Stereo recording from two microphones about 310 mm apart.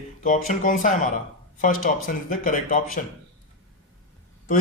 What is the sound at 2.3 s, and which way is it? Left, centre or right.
Speech, left.